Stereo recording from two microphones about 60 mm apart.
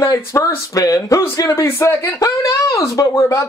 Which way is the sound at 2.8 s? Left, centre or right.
Left.